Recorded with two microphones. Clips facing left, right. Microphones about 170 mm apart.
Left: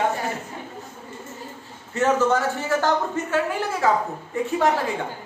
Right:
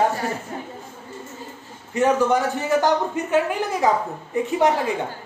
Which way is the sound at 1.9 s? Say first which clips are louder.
Right 1 dB; 15° right (ahead or behind).